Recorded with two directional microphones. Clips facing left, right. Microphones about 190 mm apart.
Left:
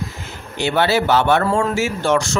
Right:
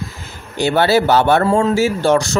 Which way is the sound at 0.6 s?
40° right (ahead or behind).